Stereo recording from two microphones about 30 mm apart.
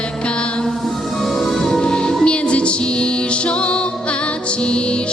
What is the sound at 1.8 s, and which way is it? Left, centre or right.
Music, left.